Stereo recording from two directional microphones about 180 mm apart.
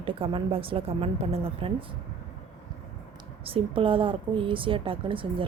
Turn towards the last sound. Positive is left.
turn(degrees=-30)  # may be behind; listen again after turning